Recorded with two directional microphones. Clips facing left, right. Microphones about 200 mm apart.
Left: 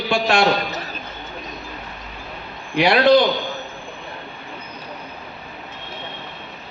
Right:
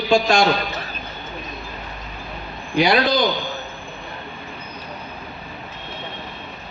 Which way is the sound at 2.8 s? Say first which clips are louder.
Left 3 dB; 65° left (ahead or behind).